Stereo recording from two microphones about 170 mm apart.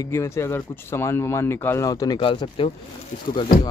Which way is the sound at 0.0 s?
15° left (ahead or behind).